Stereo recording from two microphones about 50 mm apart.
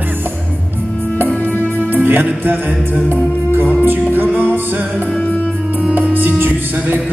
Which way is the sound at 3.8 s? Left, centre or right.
Right.